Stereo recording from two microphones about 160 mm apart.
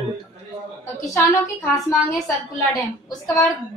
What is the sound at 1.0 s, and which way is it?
Speech, 20° left (ahead or behind).